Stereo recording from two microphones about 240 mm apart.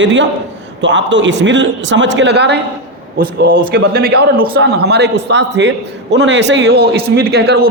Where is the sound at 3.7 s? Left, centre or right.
Right.